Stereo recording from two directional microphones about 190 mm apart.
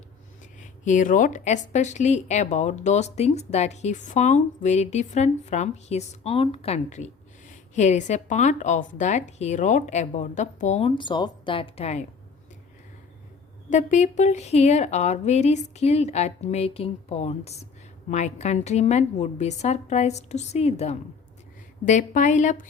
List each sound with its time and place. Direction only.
0.6 s a woman's voice: 40° left (ahead or behind)
13.7 s a woman's voice: 40° left (ahead or behind)